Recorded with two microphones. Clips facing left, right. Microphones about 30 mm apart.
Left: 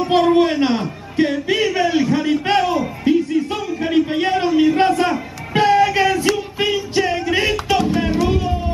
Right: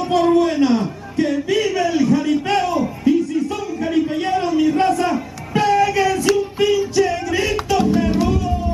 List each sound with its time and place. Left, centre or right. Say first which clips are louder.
0.2 s a man's voice: right 2 dB; left
3.1 s a sound: left 1 dB; left
5.5 s music: left 2 dB; left